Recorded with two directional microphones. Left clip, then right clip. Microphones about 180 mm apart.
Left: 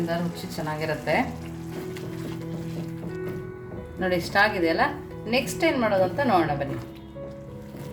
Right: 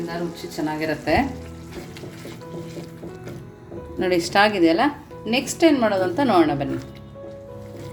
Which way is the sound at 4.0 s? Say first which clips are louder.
Right 4 dB; 40° right (ahead or behind).